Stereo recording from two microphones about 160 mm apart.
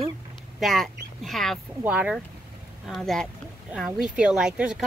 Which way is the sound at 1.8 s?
10° right (ahead or behind).